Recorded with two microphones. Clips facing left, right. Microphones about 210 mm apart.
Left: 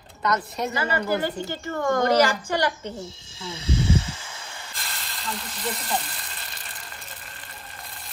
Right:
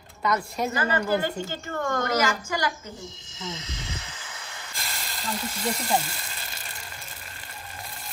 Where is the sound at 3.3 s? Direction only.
10° left (ahead or behind).